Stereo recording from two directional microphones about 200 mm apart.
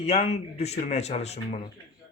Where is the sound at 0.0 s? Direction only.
30° left (ahead or behind).